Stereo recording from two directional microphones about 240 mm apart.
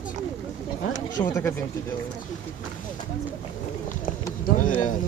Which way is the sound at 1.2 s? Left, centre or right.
Centre.